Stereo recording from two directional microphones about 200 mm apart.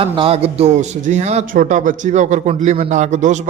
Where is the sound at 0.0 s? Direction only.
30° right (ahead or behind).